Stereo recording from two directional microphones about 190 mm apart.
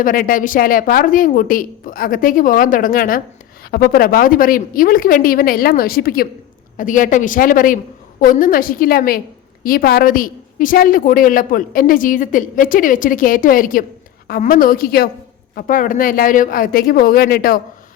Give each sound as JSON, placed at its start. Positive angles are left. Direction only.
{"t": 0.0, "sound": "a woman's voice", "side_deg": 45}